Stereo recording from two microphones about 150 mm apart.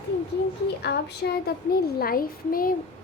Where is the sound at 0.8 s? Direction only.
90° left.